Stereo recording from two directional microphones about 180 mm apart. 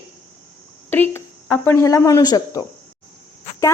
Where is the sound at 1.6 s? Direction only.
15° left (ahead or behind).